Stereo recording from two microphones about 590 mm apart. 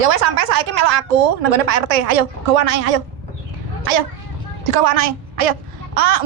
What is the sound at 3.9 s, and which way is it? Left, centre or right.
A woman's voice, right.